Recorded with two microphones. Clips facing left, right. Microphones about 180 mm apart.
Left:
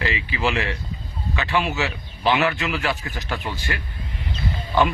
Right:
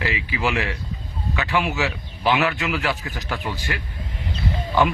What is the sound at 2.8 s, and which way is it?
Speech, 20° left (ahead or behind).